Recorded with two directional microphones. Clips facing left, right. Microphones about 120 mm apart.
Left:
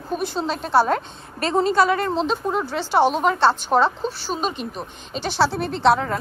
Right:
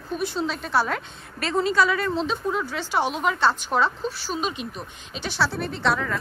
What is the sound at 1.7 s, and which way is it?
Speech, 55° left (ahead or behind).